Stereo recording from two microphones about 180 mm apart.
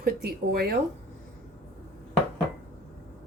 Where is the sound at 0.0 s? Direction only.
60° right (ahead or behind).